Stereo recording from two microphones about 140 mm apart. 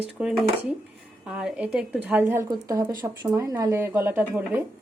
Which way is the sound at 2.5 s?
25° right (ahead or behind).